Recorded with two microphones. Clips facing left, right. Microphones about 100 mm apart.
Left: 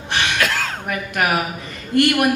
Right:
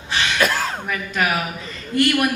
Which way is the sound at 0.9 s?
60° left (ahead or behind).